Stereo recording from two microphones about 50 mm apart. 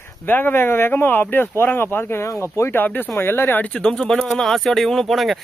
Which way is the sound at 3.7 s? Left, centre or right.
Centre.